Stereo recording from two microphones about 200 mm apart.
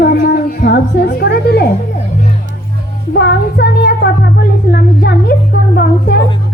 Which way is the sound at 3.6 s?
55° left (ahead or behind).